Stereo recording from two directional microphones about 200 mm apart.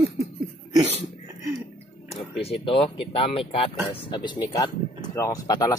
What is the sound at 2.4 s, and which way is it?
Speech, 25° left (ahead or behind).